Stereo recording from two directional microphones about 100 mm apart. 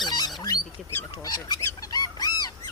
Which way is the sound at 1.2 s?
40° left (ahead or behind).